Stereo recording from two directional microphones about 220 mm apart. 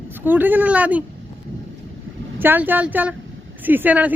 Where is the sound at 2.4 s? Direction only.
10° right (ahead or behind).